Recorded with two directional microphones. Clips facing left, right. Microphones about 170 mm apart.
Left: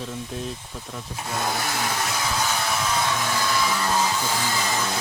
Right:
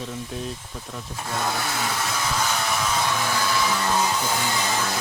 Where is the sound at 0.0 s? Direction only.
Centre (ahead or behind).